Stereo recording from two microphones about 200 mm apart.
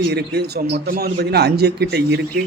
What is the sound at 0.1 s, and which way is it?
Speech, 55° right (ahead or behind).